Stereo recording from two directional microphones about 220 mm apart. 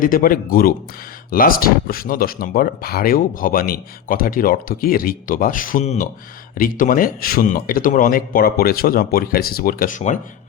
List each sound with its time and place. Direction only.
0.0 s speech: 40° left (ahead or behind)